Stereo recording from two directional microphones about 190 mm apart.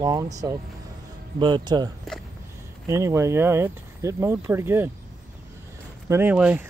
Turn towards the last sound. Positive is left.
turn(degrees=-5)  # may be behind; listen again after turning